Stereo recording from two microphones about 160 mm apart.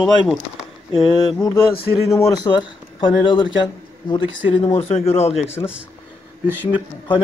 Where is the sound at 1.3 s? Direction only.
15° left (ahead or behind).